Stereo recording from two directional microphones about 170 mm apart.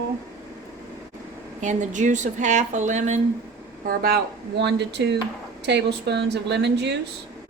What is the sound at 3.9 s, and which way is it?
Speech, 60° right (ahead or behind).